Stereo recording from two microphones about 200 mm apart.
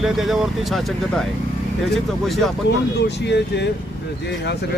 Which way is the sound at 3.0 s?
60° left (ahead or behind).